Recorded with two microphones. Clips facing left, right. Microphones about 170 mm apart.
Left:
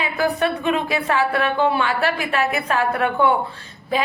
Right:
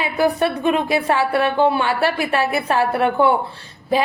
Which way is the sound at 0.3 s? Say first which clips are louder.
Right 2 dB; 35° right (ahead or behind).